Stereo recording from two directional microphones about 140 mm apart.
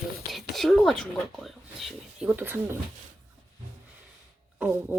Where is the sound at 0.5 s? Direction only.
Centre (ahead or behind); by 2.7 s 15° right (ahead or behind).